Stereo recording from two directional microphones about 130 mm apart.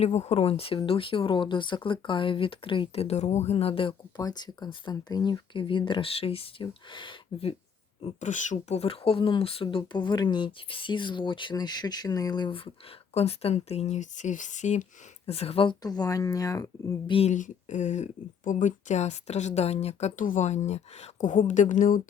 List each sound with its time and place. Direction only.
0.0 s speech: 55° left (ahead or behind)
4.2 s speech: 30° left (ahead or behind)
8.2 s speech: 70° left (ahead or behind); by 12.7 s 40° left (ahead or behind)
13.1 s speech: 55° left (ahead or behind)
15.3 s speech: 50° left (ahead or behind)
15.8 s speech: 30° left (ahead or behind)
17.1 s speech: 45° left (ahead or behind)
17.3 s speech: 75° left (ahead or behind)